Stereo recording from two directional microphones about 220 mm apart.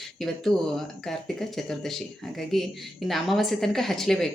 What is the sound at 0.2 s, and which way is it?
Speech, centre (ahead or behind).